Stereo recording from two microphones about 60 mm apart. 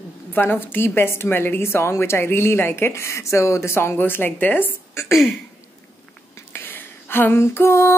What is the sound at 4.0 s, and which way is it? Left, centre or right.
Speech, left.